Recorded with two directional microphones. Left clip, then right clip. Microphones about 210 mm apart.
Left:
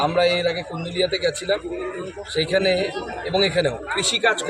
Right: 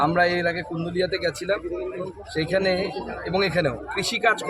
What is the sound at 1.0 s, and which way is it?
A man's voice, 5° right (ahead or behind).